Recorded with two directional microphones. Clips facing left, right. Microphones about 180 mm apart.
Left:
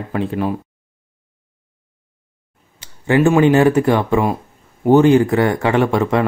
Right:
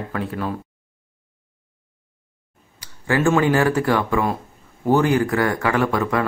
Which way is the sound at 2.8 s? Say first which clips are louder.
Left 6 dB; 20° left (ahead or behind).